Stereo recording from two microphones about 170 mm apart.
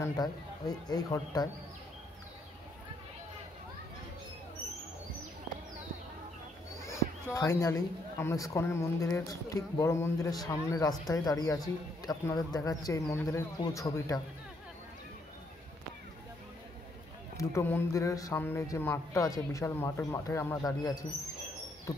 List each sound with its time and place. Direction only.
0.0 s speech: 25° left (ahead or behind)
6.8 s a sound: 15° left (ahead or behind)
8.2 s a man's voice: 15° left (ahead or behind)
17.4 s a man's voice: 15° left (ahead or behind)